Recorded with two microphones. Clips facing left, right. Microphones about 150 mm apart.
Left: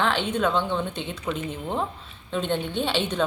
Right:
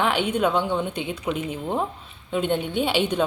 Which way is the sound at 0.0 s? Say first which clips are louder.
Right 2 dB; 10° right (ahead or behind).